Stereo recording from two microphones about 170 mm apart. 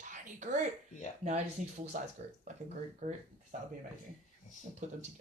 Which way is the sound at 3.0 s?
45° right (ahead or behind).